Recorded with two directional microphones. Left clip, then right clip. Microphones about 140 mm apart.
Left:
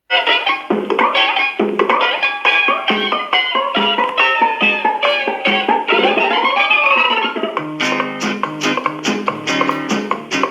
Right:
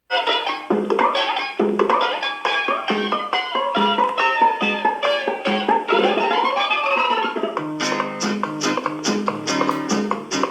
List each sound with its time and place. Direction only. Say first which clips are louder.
0.1 s music: left 6 dB; 25° left (ahead or behind)